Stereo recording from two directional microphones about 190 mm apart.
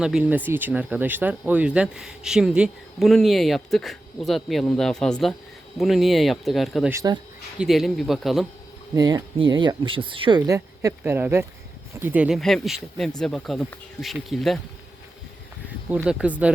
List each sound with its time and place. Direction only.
0.0 s speech: 5° right (ahead or behind)
6.9 s speech: 20° right (ahead or behind)
7.6 s speech: centre (ahead or behind)
9.0 s speech: 20° right (ahead or behind); by 14.6 s centre (ahead or behind)
15.9 s speech: 5° right (ahead or behind)